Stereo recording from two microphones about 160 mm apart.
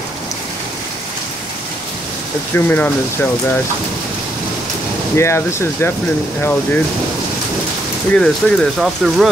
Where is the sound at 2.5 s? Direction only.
10° left (ahead or behind).